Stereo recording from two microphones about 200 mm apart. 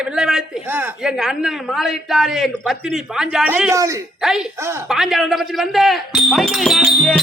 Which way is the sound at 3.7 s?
15° right (ahead or behind).